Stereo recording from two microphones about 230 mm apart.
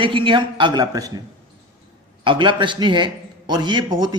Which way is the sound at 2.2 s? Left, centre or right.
Right.